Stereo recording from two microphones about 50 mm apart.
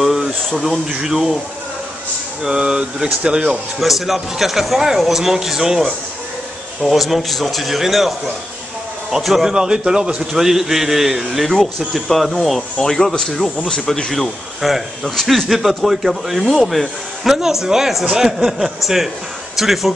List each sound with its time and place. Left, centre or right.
0.0 s a sound: centre
0.6 s speech: centre
2.4 s speech: centre
3.8 s speech: centre
9.1 s speech: centre
14.1 s speech: centre